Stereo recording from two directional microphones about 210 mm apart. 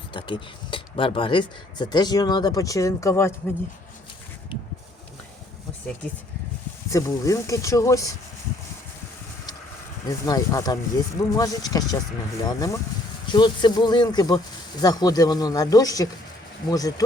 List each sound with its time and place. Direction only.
0.1 s speech: 25° left (ahead or behind)
6.9 s speech: 15° left (ahead or behind)
10.1 s speech: 15° left (ahead or behind)